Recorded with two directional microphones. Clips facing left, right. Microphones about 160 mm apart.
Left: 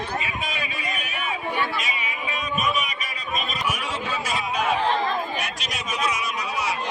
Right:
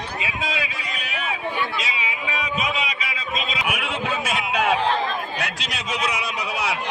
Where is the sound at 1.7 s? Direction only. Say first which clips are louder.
Right 1 dB; 75° right (ahead or behind).